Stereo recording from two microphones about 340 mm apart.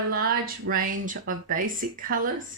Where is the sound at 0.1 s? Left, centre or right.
Right.